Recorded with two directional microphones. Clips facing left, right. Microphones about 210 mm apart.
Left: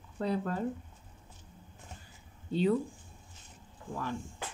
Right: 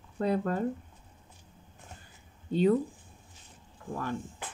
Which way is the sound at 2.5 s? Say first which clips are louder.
Right 4 dB; 50° right (ahead or behind).